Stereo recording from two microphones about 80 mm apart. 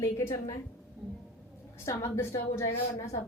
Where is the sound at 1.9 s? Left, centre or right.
Left.